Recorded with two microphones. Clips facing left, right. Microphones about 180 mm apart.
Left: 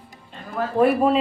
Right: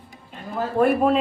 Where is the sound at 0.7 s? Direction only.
5° left (ahead or behind).